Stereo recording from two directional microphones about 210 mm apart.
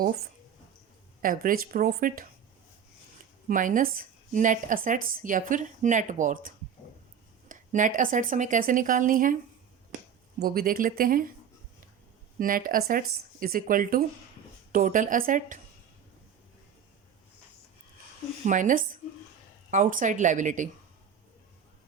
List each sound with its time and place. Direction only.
1.2 s speech: 40° right (ahead or behind)
3.5 s speech: 40° right (ahead or behind)
10.4 s speech: 45° right (ahead or behind)
12.4 s speech: 40° right (ahead or behind)
18.4 s speech: 40° right (ahead or behind)